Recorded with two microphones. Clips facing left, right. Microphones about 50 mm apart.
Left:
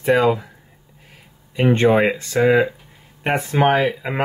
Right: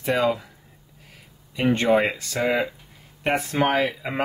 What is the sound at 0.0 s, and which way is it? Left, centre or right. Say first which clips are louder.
Speech: left 6 dB; centre.